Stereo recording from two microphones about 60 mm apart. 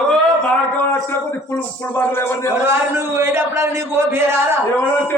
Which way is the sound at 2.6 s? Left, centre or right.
Right.